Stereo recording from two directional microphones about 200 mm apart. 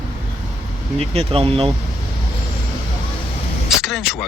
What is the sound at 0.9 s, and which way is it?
Speech, 30° right (ahead or behind).